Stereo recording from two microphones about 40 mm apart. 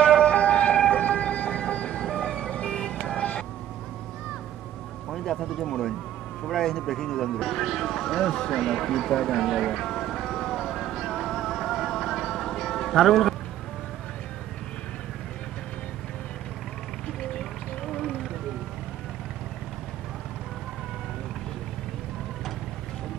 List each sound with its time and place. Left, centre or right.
0.0 s emergency vehicle: left
0.7 s ambulance: left
2.0 s vehicle: centre
5.1 s speech: centre
8.5 s music: centre
17.3 s a sound: centre